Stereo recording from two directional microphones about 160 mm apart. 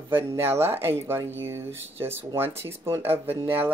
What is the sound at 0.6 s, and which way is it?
Speech, 15° right (ahead or behind).